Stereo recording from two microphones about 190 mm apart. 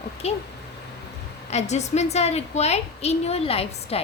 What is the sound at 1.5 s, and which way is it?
A woman's voice, 35° left (ahead or behind).